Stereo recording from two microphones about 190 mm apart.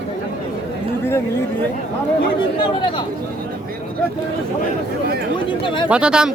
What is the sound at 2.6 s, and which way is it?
Speech, 25° left (ahead or behind).